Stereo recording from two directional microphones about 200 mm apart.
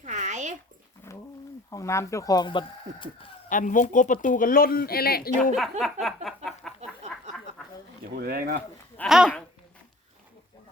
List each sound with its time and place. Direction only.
0.0 s a sound: 35° right (ahead or behind)
1.7 s speech: 15° left (ahead or behind)
3.5 s speech: 40° left (ahead or behind)
5.4 s a woman's voice: centre (ahead or behind)
6.2 s a sound: centre (ahead or behind)
8.1 s speech: 50° right (ahead or behind)
9.0 s speech: centre (ahead or behind)